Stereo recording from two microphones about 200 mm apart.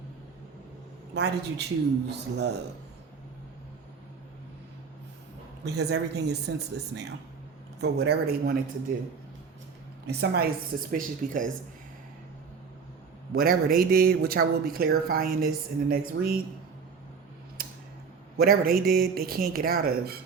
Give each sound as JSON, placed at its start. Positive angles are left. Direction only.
{"t": 1.1, "sound": "speech", "side_deg": -55}
{"t": 5.6, "sound": "speech", "side_deg": -55}
{"t": 10.1, "sound": "speech", "side_deg": -50}
{"t": 13.3, "sound": "speech", "side_deg": -50}
{"t": 18.3, "sound": "speech", "side_deg": -50}